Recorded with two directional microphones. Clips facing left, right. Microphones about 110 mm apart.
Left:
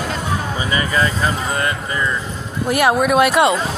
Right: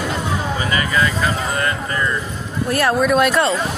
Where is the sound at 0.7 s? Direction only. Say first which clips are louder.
Left 1 dB; 30° left (ahead or behind).